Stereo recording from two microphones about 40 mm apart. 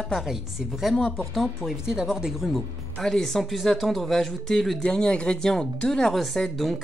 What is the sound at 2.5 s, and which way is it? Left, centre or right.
Speech, centre.